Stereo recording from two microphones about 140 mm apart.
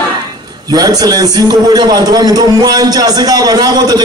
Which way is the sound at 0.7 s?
30° right (ahead or behind).